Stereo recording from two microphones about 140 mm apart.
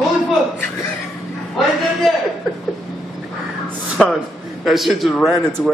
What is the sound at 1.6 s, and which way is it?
Speech, centre (ahead or behind).